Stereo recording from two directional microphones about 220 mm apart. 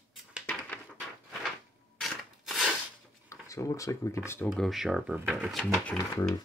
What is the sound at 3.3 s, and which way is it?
Speech, 15° left (ahead or behind).